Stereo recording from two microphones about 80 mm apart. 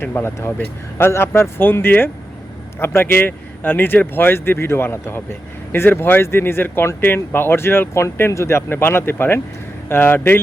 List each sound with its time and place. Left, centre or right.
0.0 s speech: left